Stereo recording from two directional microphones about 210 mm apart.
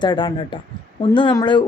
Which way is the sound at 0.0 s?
20° left (ahead or behind).